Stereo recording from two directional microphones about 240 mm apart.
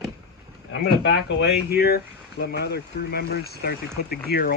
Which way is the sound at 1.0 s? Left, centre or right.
Left.